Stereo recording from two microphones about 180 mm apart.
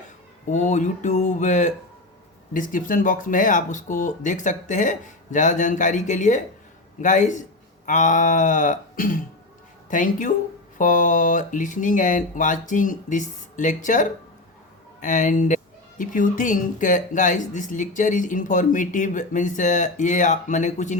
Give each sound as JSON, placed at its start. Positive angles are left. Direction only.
{"t": 0.5, "sound": "speech", "side_deg": 40}